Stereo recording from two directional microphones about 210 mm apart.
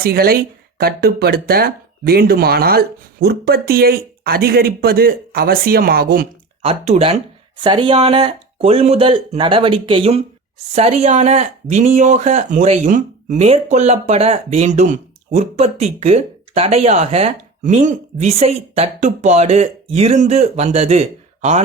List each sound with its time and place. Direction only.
0.0 s speech: 45° right (ahead or behind)
6.6 s speech: 30° right (ahead or behind)